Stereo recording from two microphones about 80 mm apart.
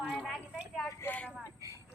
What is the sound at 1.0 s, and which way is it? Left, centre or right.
Vehicle, centre.